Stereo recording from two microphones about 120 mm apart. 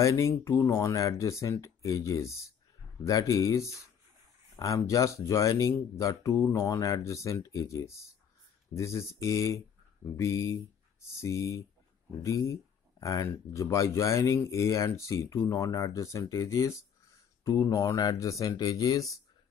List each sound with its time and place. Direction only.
0.0 s speech: 25° left (ahead or behind)